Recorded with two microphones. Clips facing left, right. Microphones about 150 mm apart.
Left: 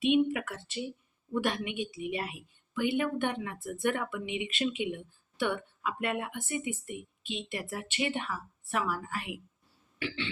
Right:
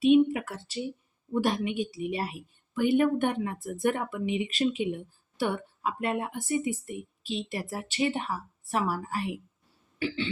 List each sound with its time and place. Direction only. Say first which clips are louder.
0.0 s a woman's voice: right 5 dB; 35° right (ahead or behind)